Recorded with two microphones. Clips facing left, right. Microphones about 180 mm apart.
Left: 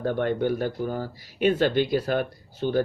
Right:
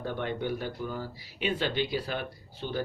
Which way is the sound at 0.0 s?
50° left (ahead or behind).